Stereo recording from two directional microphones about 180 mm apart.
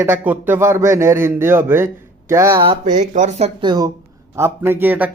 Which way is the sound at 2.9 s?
40° right (ahead or behind).